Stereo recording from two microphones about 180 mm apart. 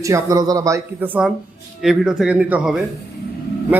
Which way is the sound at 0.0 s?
20° right (ahead or behind).